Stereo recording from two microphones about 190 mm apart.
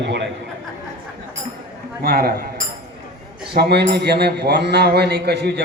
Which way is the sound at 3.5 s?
60° right (ahead or behind).